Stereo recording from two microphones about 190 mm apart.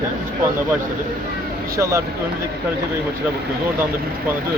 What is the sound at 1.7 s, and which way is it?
Speech, 15° right (ahead or behind).